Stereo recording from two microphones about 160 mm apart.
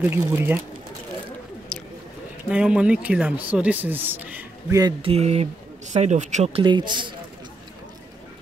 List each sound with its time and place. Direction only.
0.0 s speech: 15° right (ahead or behind)
2.5 s speech: 5° right (ahead or behind)
5.0 s speech: 40° right (ahead or behind)
6.6 s a man's voice: 30° right (ahead or behind)